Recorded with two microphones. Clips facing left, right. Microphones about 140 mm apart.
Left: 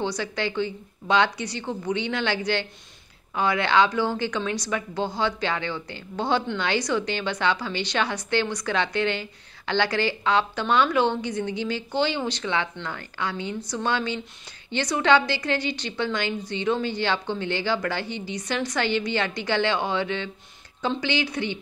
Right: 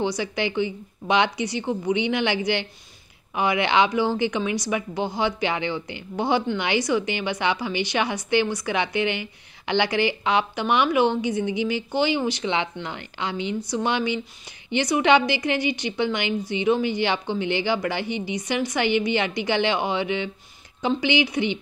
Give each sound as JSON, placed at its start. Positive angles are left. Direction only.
{"t": 0.0, "sound": "a woman's voice", "side_deg": -15}